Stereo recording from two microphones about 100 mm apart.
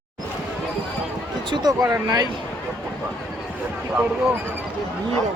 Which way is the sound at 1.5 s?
40° right (ahead or behind).